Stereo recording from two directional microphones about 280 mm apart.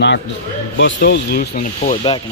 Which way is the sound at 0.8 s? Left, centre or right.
Left.